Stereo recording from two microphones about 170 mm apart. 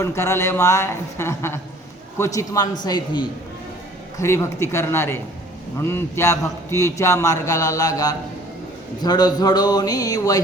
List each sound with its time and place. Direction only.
0.0 s a man's voice: 15° left (ahead or behind)
4.2 s a man's voice: 15° left (ahead or behind)